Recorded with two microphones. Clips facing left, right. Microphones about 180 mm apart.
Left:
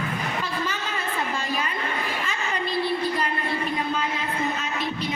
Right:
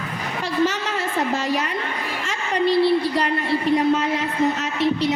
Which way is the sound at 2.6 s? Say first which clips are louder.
Right 9 dB; 80° right.